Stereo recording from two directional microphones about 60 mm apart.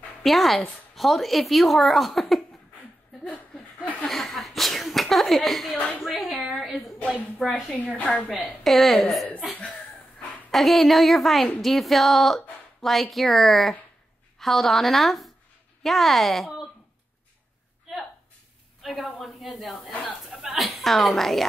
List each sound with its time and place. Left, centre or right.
0.2 s speech: centre
3.3 s chuckle: left
4.1 s a sound: centre
5.7 s a woman's voice: left
5.9 s a sound: centre
7.4 s a woman's voice: centre
7.7 s a woman's voice: left
8.3 s speech: centre
9.5 s cough: left
10.5 s speech: centre
18.8 s a woman's voice: centre
19.9 s speech: left
20.2 s a sound: centre